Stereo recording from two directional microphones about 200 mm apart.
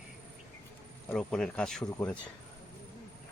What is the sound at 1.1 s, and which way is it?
Speech, centre (ahead or behind).